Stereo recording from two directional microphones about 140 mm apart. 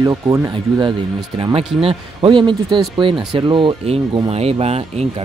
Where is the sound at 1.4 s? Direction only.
40° right (ahead or behind).